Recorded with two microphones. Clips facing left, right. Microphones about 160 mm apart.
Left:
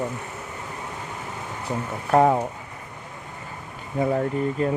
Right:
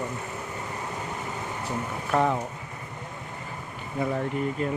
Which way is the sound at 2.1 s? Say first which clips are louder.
Left 6 dB; 45° left (ahead or behind).